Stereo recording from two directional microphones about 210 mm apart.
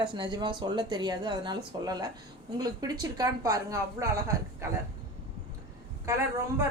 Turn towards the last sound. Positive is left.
turn(degrees=-15)  # may be behind; listen again after turning